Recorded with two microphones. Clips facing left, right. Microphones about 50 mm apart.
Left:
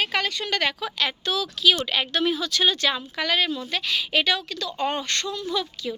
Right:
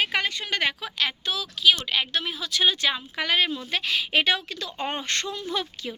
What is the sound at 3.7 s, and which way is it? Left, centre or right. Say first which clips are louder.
A woman's voice: right 1 dB; right.